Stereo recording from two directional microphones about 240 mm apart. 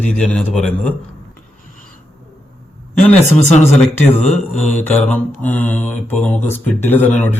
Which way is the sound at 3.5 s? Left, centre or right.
Left.